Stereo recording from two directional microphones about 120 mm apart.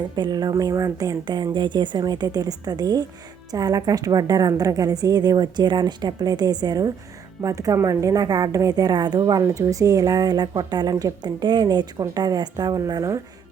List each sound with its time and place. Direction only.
0.2 s a woman's voice: 35° right (ahead or behind)